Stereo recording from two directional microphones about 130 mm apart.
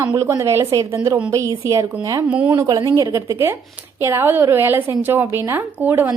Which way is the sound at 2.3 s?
10° right (ahead or behind).